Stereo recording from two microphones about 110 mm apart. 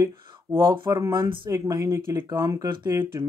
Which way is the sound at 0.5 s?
30° right (ahead or behind).